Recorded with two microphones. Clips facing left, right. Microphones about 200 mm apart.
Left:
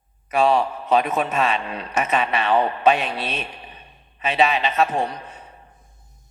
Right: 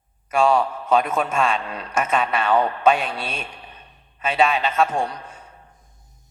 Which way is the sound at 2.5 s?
20° left (ahead or behind).